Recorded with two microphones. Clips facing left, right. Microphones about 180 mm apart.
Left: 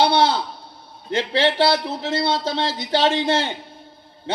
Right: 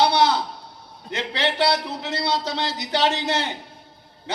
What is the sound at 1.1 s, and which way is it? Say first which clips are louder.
Speech: left 6 dB; 30° left (ahead or behind).